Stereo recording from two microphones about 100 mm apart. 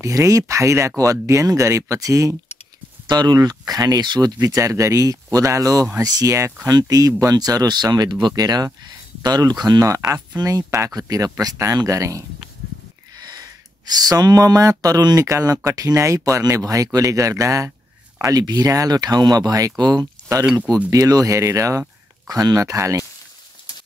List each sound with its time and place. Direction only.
0.0 s speech: 30° right (ahead or behind)
3.1 s speech: 45° right (ahead or behind)
4.5 s speech: 35° right (ahead or behind)
13.3 s speech: 45° right (ahead or behind)